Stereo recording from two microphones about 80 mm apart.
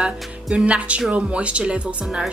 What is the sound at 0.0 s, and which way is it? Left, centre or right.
Speech, centre.